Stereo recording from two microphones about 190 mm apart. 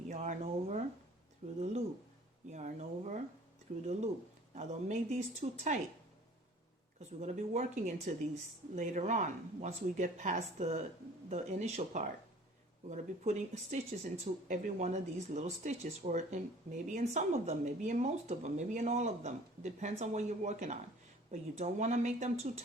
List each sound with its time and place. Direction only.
0.1 s speech: 40° right (ahead or behind)
7.2 s speech: 40° right (ahead or behind)